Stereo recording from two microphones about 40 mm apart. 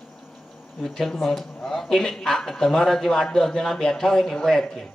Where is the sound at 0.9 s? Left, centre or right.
Centre.